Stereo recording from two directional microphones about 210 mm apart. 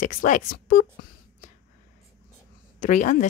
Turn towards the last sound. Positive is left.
turn(degrees=35)  # may be behind; listen again after turning